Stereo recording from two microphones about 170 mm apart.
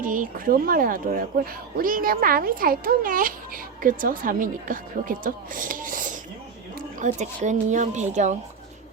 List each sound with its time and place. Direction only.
0.0 s a woman's voice: 50° right (ahead or behind)
6.7 s a sound: 45° right (ahead or behind)
7.4 s speech: 45° right (ahead or behind)